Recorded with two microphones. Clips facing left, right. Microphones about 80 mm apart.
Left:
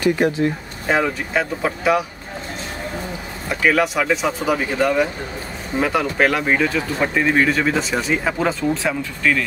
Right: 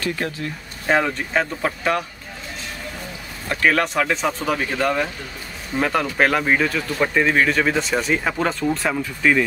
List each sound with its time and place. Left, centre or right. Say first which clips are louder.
0.0 s speech: left 8 dB; centre
0.8 s speech: even; centre
3.4 s speech: left 1 dB; centre
9.2 s speech: right 1 dB; centre